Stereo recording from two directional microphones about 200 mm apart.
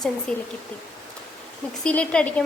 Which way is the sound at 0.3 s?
5° left (ahead or behind).